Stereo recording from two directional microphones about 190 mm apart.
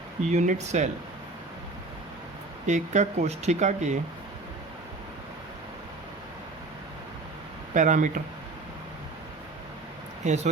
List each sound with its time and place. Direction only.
0.3 s speech: 40° right (ahead or behind)
2.6 s speech: 40° right (ahead or behind)
7.7 s speech: 40° right (ahead or behind)
10.2 s speech: 35° right (ahead or behind)